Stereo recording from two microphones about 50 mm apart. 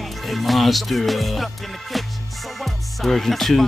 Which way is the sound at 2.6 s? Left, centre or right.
Centre.